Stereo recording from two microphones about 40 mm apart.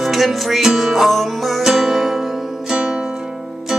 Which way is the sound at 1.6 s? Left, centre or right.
Centre.